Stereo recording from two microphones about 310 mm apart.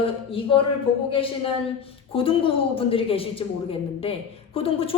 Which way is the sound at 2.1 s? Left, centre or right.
Centre.